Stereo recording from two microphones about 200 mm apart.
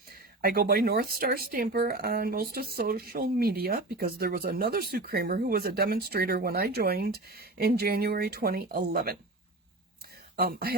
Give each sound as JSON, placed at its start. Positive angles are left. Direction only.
{"t": 0.4, "sound": "speech", "side_deg": -50}
{"t": 10.3, "sound": "speech", "side_deg": -50}